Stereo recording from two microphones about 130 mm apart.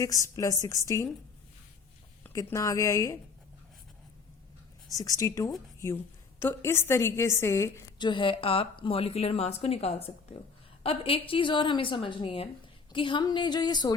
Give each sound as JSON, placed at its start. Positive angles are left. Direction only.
{"t": 0.0, "sound": "a woman's voice", "side_deg": 25}
{"t": 2.3, "sound": "a woman's voice", "side_deg": 25}
{"t": 4.9, "sound": "a woman's voice", "side_deg": 25}
{"t": 7.9, "sound": "a woman's voice", "side_deg": 35}